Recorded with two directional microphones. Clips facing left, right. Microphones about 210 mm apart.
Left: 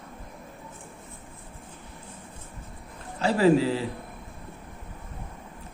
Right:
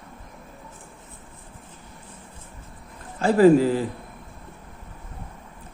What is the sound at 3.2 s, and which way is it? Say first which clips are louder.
Speech: right 5 dB; 50° right (ahead or behind).